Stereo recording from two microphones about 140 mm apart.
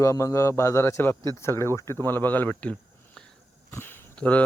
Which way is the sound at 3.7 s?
15° left (ahead or behind).